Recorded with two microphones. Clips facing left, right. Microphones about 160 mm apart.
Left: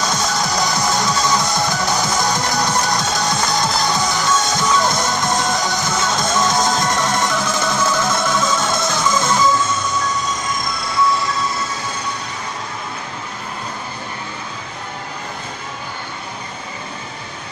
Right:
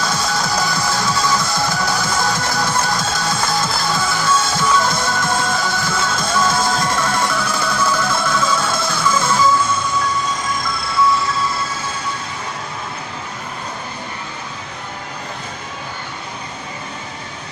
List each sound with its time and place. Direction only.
0.0 s music: 20° left (ahead or behind)